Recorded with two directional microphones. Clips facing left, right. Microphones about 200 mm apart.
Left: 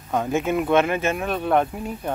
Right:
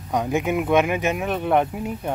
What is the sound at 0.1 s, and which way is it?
Speech, 15° right (ahead or behind).